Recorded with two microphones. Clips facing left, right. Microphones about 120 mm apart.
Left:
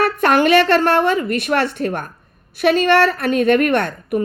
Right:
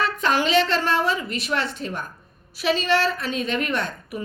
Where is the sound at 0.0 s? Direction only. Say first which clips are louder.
Left 7 dB; 60° left (ahead or behind).